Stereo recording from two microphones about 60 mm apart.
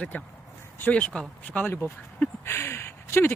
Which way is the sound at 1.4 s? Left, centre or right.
Left.